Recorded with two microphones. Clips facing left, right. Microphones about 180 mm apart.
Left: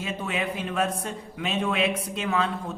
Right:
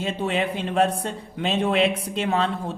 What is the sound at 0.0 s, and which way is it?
A man's voice, 30° right (ahead or behind).